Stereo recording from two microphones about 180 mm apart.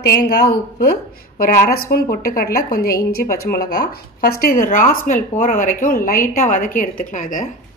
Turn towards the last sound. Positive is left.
turn(degrees=50)  # may be behind; listen again after turning